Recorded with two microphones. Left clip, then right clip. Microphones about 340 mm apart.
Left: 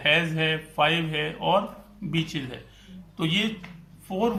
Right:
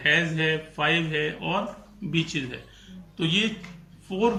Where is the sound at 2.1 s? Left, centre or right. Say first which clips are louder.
Right 2 dB; centre.